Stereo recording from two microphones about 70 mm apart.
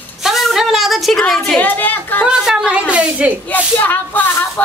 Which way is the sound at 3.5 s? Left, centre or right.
Left.